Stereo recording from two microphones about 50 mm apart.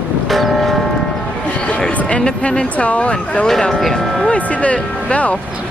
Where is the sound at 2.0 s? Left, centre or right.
Left.